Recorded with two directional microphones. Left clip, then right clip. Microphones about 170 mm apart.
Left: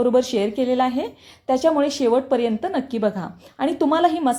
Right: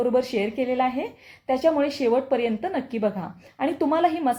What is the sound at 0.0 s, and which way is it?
A woman's voice, 35° left (ahead or behind).